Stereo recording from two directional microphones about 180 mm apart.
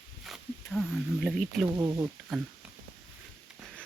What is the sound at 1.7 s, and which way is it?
Speech, 15° right (ahead or behind).